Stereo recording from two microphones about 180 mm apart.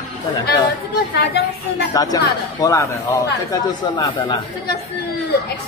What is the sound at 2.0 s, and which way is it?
Speech, 20° left (ahead or behind).